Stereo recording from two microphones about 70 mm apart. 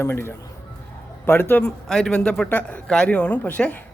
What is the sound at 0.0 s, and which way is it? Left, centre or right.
A man's voice, left.